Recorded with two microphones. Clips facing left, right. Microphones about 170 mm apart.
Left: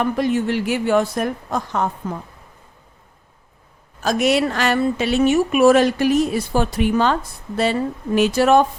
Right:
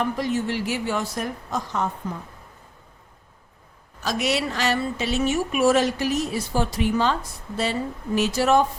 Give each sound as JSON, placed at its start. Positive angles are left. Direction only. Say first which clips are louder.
{"t": 0.0, "sound": "a woman's voice", "louder": "left 5 dB", "side_deg": 60}
{"t": 4.0, "sound": "a woman's voice", "louder": "left 7 dB", "side_deg": 50}